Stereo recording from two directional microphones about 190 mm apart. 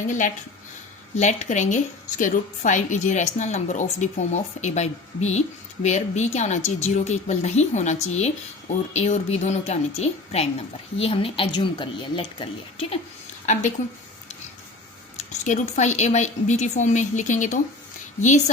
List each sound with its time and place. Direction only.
1.1 s a woman's voice: 40° left (ahead or behind)
13.4 s a woman's voice: 40° left (ahead or behind)
15.2 s a woman's voice: 40° left (ahead or behind)